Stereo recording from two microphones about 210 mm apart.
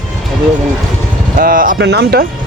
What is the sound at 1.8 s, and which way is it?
Speech, 55° right (ahead or behind).